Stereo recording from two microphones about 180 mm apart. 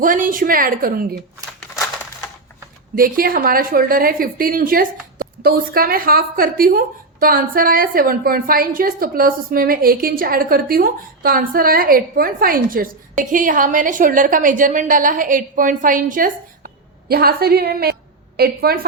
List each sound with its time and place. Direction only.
0.0 s a woman's voice: 50° right (ahead or behind)
2.9 s a woman's voice: 50° right (ahead or behind)